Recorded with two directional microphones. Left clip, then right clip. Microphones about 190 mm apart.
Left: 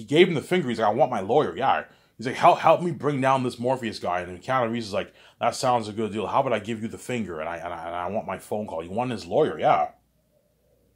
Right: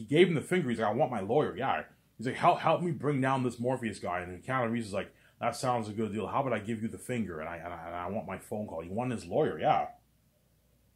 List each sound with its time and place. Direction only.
0.1 s speech: 30° left (ahead or behind)